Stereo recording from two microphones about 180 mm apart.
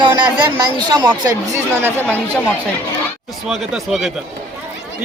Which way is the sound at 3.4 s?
Centre (ahead or behind).